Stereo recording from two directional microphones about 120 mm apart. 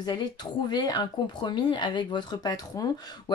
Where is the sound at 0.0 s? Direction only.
40° left (ahead or behind).